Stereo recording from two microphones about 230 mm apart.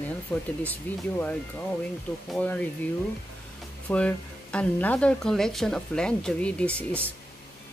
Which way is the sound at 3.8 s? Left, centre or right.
Centre.